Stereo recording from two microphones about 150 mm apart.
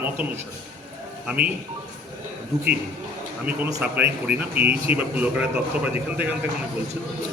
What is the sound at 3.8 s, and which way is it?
A man's voice, 10° right (ahead or behind).